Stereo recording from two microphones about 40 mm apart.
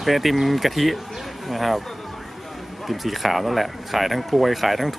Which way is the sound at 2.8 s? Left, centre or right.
Centre.